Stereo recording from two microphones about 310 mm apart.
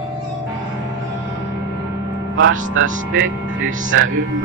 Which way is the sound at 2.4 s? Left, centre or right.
Right.